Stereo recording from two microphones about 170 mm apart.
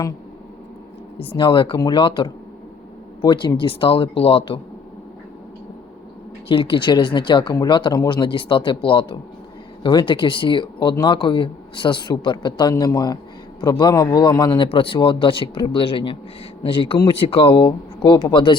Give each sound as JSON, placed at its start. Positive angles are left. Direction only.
{"t": 1.4, "sound": "a man's voice", "side_deg": 30}
{"t": 6.5, "sound": "speech", "side_deg": 30}